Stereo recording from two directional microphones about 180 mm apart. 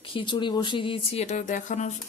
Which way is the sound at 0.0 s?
30° left (ahead or behind).